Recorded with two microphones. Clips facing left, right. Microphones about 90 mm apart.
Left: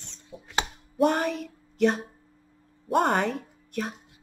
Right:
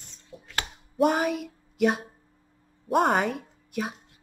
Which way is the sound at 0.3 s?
20° left (ahead or behind).